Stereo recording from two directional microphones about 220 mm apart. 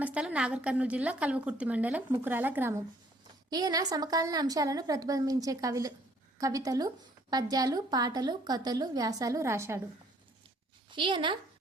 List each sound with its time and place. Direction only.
0.0 s a woman's voice: 5° right (ahead or behind)
10.9 s a woman's voice: 20° right (ahead or behind)